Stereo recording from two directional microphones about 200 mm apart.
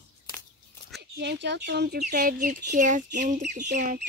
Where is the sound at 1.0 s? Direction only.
55° right (ahead or behind).